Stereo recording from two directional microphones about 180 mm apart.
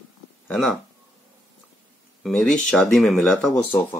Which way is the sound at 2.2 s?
5° left (ahead or behind).